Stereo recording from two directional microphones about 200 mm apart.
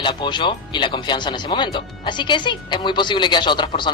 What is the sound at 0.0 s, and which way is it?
Speech, 25° left (ahead or behind).